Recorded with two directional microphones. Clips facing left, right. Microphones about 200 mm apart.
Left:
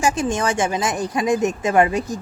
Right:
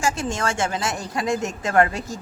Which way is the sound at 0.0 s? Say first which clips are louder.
Left 4 dB; 20° left (ahead or behind).